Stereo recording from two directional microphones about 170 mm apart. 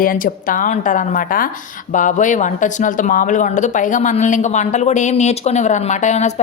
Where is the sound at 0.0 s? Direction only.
55° left (ahead or behind).